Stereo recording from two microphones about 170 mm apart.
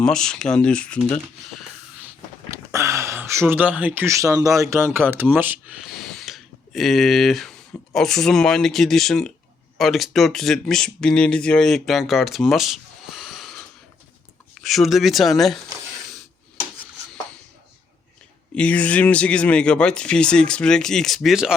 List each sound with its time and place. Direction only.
0.0 s speech: 5° left (ahead or behind)
2.5 s speech: 15° right (ahead or behind); by 15.5 s centre (ahead or behind)
18.5 s speech: 10° left (ahead or behind)